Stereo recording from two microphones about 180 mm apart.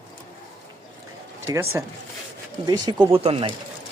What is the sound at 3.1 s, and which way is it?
Speech, 30° right (ahead or behind).